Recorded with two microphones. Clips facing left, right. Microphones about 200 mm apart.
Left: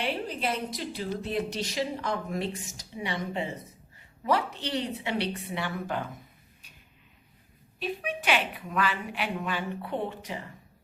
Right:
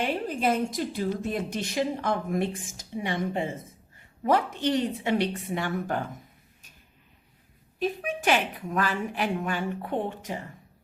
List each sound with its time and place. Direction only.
0.0 s a woman's voice: 45° right (ahead or behind)
7.8 s a woman's voice: 45° right (ahead or behind)